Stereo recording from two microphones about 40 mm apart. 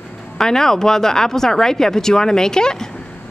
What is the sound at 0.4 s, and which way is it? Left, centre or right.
Speech, centre.